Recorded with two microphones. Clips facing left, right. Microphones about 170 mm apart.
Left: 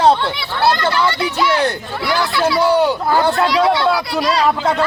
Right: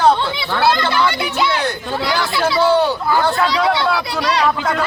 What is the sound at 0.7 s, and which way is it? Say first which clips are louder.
Speech: left 1 dB; 15° right (ahead or behind).